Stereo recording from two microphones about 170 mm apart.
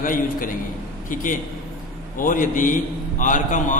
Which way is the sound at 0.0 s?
55° left (ahead or behind).